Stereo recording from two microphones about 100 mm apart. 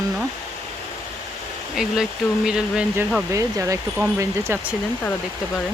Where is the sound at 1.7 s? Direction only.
5° right (ahead or behind).